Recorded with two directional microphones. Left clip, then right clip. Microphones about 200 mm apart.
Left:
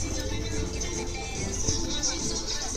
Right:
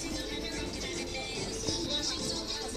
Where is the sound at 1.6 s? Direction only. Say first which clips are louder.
Left 3 dB; 35° left (ahead or behind).